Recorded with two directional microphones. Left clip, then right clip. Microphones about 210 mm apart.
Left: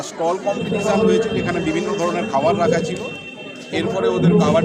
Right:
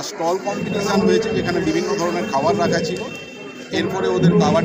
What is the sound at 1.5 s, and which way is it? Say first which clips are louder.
Speech: right 1 dB; 5° left (ahead or behind).